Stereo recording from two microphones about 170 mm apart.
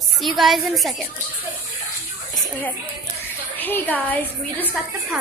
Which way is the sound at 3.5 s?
10° left (ahead or behind).